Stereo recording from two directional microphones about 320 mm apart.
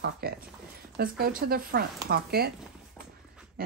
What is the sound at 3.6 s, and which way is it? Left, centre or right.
Pig, right.